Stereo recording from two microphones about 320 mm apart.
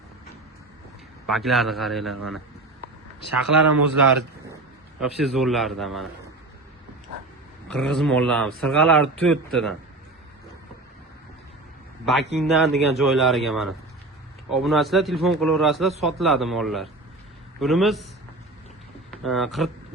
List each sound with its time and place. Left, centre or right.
1.3 s speech: centre
3.2 s speech: right
4.9 s speech: centre
7.7 s speech: centre
12.4 s speech: centre
19.1 s speech: centre